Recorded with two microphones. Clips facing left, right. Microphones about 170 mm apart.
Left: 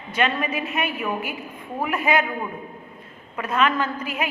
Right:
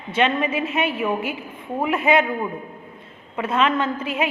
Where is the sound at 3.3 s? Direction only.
25° right (ahead or behind).